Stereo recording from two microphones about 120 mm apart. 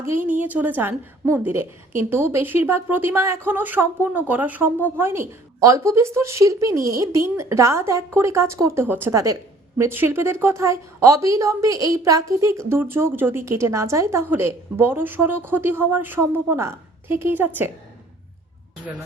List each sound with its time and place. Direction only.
0.2 s a woman's voice: 15° right (ahead or behind)